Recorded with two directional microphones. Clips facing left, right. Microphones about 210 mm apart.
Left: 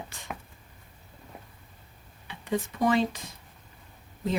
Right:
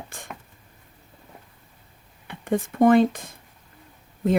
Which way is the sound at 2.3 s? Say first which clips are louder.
Right 5 dB; 55° right (ahead or behind).